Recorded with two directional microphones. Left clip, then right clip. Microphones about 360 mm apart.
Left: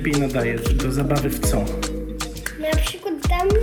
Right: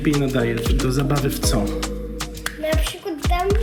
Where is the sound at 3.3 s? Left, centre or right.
Centre.